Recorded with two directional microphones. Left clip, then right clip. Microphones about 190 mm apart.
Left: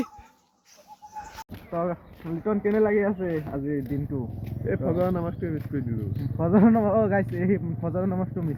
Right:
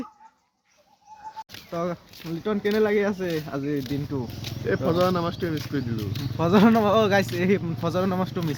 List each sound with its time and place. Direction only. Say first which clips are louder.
1.7 s speech: left 1 dB; 25° right (ahead or behind)
6.4 s speech: right 2 dB; 20° right (ahead or behind)